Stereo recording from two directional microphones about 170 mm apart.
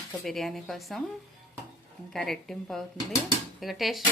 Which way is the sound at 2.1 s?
Centre (ahead or behind).